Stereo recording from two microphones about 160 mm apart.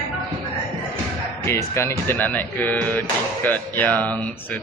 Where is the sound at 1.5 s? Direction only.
15° left (ahead or behind).